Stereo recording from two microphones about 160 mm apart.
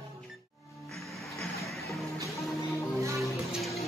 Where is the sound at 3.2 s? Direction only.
Centre (ahead or behind).